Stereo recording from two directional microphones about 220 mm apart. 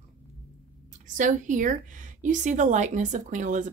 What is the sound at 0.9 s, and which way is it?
Speech, 35° right (ahead or behind).